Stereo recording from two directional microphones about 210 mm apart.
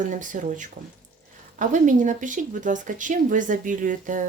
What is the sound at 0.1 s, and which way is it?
Speech, 40° right (ahead or behind).